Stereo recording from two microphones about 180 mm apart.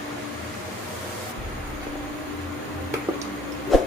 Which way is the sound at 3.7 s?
Centre (ahead or behind).